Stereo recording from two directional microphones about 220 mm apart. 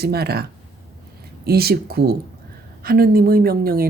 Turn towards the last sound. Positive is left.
turn(degrees=-40)  # may be behind; listen again after turning